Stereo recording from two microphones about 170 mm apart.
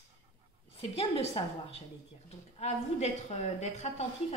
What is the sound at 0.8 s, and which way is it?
A woman's voice, 30° left (ahead or behind).